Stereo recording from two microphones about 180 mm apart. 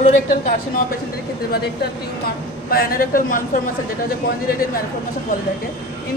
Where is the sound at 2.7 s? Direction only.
55° left (ahead or behind).